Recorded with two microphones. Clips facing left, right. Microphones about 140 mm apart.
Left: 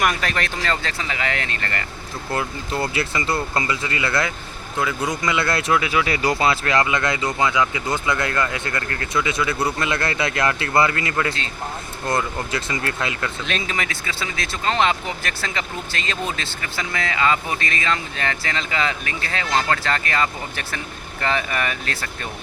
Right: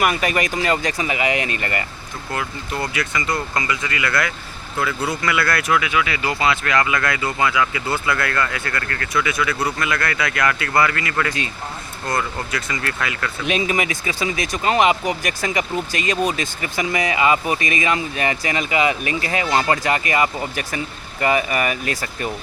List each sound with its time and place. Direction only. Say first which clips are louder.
0.0 s speech: right 3 dB; 10° right (ahead or behind)
2.3 s speech: left 1 dB; 30° left (ahead or behind)
13.4 s speech: right 9 dB; 15° right (ahead or behind)